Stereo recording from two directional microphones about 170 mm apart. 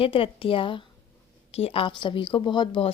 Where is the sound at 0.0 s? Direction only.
30° left (ahead or behind).